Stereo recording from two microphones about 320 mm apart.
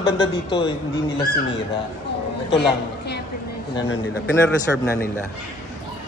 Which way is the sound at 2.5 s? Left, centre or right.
Left.